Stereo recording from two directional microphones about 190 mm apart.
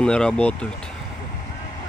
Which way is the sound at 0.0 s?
5° left (ahead or behind).